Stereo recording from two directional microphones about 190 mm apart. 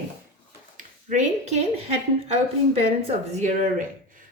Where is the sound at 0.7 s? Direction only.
40° right (ahead or behind).